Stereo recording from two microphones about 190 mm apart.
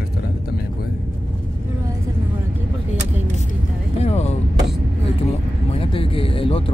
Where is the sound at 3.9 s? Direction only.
35° left (ahead or behind).